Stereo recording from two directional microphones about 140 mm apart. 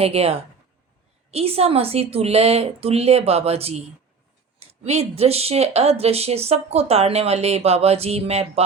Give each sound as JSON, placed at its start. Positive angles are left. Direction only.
{"t": 0.0, "sound": "speech", "side_deg": -45}